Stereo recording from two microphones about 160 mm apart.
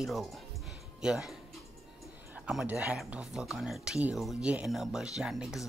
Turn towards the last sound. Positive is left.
turn(degrees=-5)  # may be behind; listen again after turning